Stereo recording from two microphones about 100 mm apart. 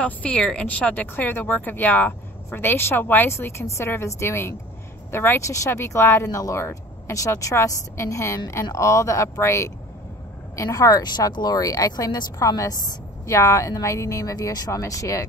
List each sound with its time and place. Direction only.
0.0 s speech: 10° left (ahead or behind); by 15.2 s 30° left (ahead or behind)